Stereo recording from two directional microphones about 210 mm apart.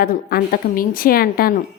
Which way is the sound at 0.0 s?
45° left (ahead or behind).